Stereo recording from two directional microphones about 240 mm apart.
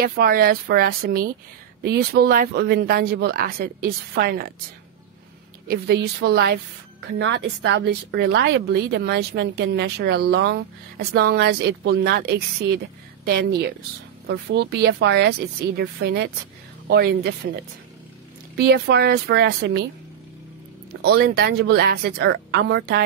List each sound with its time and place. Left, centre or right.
0.0 s speech: right
5.7 s a woman's voice: right
18.7 s a woman's voice: right
21.0 s a woman's voice: right